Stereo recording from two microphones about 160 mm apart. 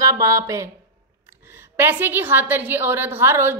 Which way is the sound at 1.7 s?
15° right (ahead or behind).